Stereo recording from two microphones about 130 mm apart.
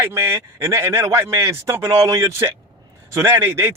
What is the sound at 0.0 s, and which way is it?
Speech, 20° right (ahead or behind).